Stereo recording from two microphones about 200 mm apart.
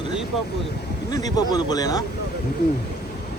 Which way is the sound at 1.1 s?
20° left (ahead or behind).